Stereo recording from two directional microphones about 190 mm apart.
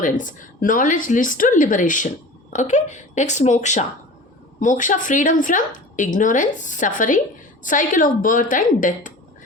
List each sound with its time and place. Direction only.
0.0 s a woman's voice: 45° left (ahead or behind)